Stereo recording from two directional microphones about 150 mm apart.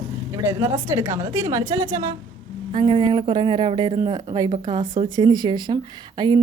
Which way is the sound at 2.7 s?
35° right (ahead or behind).